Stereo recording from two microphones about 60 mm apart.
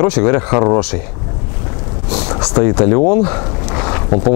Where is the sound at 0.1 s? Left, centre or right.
Centre.